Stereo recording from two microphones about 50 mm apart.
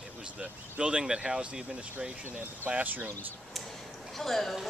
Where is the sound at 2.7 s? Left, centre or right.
Right.